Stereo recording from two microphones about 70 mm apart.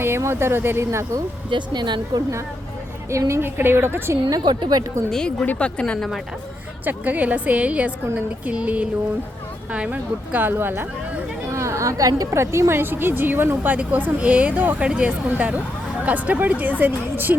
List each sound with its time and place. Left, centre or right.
0.2 s speech: right
1.5 s speech: right
3.1 s a woman's voice: right
3.4 s speech: right
4.3 s a woman's voice: right
5.1 s speech: centre
6.8 s speech: right
11.5 s a sound: right
12.4 s speech: right